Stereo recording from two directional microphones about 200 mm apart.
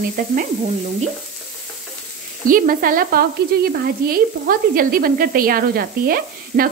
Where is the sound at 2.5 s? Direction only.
45° right (ahead or behind).